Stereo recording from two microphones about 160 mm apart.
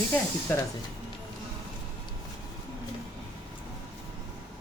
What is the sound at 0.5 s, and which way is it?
Speech, 10° left (ahead or behind).